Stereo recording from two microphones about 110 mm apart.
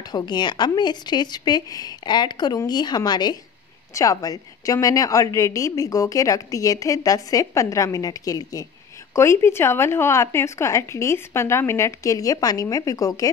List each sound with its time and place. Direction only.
0.0 s a woman's voice: 40° left (ahead or behind)